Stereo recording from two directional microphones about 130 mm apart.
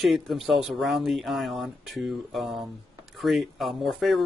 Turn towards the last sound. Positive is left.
turn(degrees=0)  # may be behind; listen again after turning